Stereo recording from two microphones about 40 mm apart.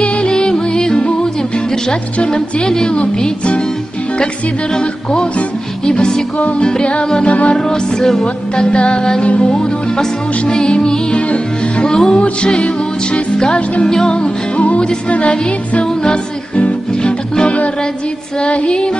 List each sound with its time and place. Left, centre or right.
0.0 s music: left
2.3 s music: centre
5.9 s music: centre
7.5 s music: centre
11.1 s music: left
11.9 s music: centre
12.2 s music: left
13.8 s music: centre
14.8 s music: left
18.4 s music: left